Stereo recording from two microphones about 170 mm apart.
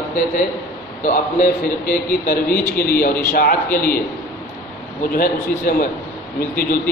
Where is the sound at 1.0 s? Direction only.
55° left (ahead or behind).